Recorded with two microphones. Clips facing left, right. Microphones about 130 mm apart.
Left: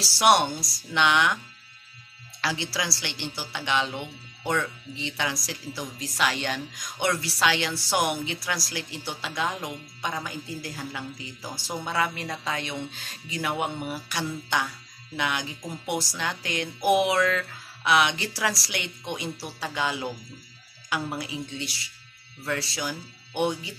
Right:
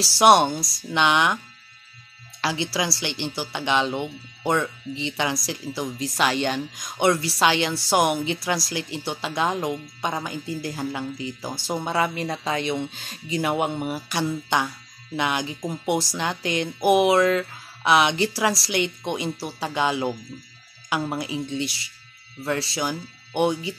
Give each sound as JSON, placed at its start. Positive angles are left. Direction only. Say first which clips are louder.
{"t": 0.2, "sound": "speech", "louder": "right 5 dB", "side_deg": -25}
{"t": 2.4, "sound": "speech", "louder": "right 4 dB", "side_deg": -20}
{"t": 21.1, "sound": "speech", "louder": "right 5 dB", "side_deg": -25}